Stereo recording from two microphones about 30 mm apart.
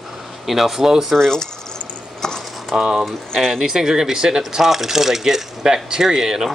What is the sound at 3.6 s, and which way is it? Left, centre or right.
Speech, centre.